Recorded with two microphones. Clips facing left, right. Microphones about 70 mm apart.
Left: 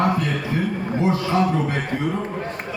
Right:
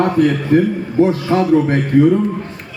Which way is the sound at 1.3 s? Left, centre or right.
Right.